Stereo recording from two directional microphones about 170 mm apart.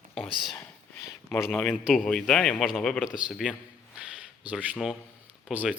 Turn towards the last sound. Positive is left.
turn(degrees=-10)  # may be behind; listen again after turning